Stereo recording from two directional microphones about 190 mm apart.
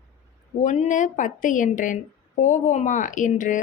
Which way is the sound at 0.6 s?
35° left (ahead or behind).